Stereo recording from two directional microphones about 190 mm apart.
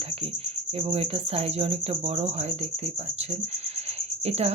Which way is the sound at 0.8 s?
30° right (ahead or behind).